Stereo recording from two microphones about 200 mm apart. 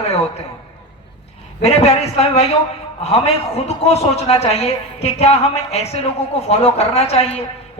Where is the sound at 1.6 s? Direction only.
30° left (ahead or behind).